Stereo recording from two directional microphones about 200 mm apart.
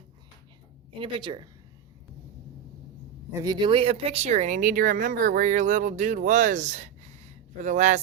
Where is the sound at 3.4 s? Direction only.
20° right (ahead or behind).